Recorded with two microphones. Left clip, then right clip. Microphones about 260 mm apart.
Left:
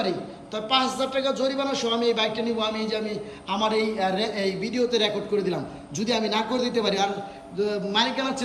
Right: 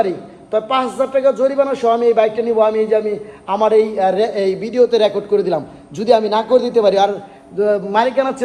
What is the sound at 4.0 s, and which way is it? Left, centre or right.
A woman's voice, centre.